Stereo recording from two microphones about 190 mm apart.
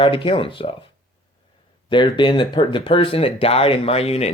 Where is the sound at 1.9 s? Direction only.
25° left (ahead or behind).